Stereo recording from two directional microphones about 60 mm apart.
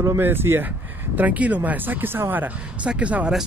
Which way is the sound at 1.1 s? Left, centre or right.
Right.